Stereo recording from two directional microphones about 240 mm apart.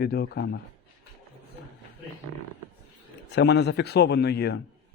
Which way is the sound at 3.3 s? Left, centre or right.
Left.